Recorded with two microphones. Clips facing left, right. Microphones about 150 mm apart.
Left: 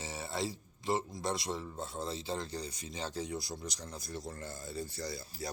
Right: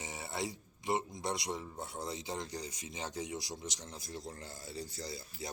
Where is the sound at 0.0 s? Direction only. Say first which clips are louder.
Left 2 dB; 20° right (ahead or behind).